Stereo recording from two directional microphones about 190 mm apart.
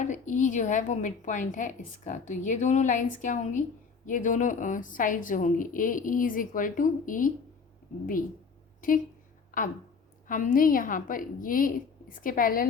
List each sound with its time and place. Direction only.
0.0 s a woman's voice: 40° left (ahead or behind)
8.8 s a woman's voice: 45° left (ahead or behind)